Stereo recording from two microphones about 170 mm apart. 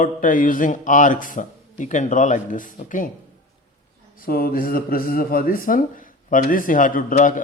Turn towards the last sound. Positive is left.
turn(degrees=50)  # may be behind; listen again after turning